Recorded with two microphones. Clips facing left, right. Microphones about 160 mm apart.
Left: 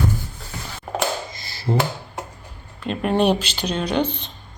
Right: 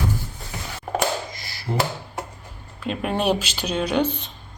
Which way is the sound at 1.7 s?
30° left (ahead or behind).